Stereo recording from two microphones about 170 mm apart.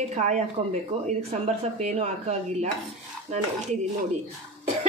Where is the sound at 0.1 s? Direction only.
45° right (ahead or behind).